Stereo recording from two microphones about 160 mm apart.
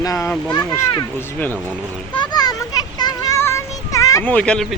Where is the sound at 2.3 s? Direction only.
25° left (ahead or behind).